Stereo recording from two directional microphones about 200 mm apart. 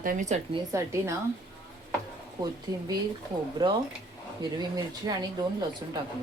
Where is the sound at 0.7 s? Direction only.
15° right (ahead or behind).